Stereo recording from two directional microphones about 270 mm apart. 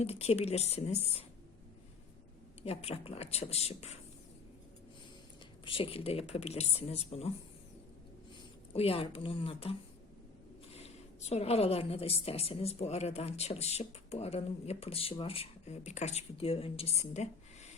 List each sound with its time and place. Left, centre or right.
0.0 s a woman's voice: left
2.6 s a woman's voice: left
5.6 s a woman's voice: centre
8.7 s a woman's voice: left
10.8 s a woman's voice: left